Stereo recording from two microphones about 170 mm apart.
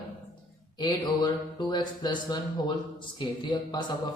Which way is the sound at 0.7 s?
25° left (ahead or behind).